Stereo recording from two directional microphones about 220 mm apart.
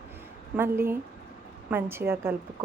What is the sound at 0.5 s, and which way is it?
A woman's voice, 10° right (ahead or behind).